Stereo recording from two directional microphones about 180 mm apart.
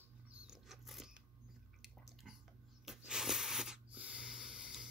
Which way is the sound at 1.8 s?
Centre (ahead or behind).